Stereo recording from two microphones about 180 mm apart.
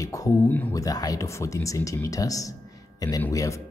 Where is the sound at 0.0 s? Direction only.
20° left (ahead or behind).